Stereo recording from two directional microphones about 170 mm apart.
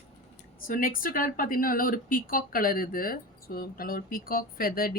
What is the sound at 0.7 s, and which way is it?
Speech, 55° left (ahead or behind).